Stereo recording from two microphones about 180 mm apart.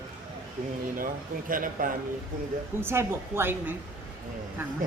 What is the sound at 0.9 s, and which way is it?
Speech, 50° right (ahead or behind).